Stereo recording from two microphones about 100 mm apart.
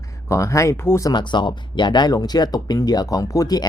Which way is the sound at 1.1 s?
50° left (ahead or behind).